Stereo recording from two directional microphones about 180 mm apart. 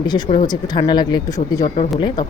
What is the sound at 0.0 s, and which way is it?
Speech, 25° left (ahead or behind).